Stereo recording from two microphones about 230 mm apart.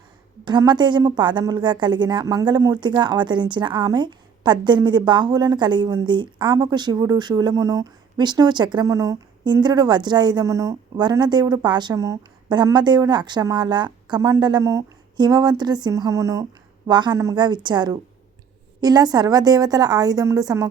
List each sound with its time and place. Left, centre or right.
0.4 s a woman's voice: centre